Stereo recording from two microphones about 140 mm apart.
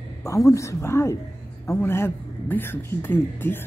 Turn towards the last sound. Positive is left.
turn(degrees=15)  # may be behind; listen again after turning